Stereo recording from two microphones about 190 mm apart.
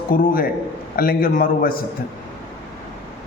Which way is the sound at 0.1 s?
50° left (ahead or behind).